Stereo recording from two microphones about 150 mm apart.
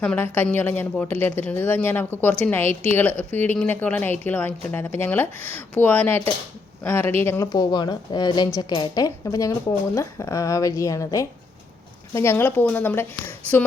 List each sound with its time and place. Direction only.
0.0 s a woman's voice: 10° left (ahead or behind)